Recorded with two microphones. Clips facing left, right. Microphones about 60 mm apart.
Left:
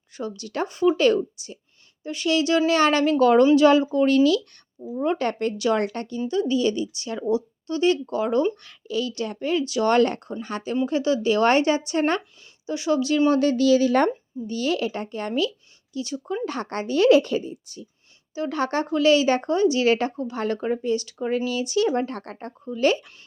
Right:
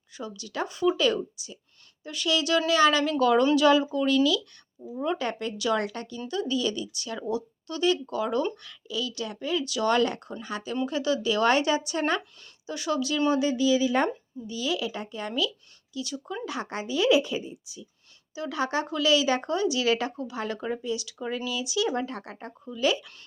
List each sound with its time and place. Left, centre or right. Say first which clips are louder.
0.1 s speech: left 6 dB; left
12.6 s speech: left 6 dB; left
13.3 s speech: left 4 dB; left
15.9 s speech: left 4 dB; left
16.5 s a woman's voice: left 4 dB; left
18.3 s speech: left 4 dB; left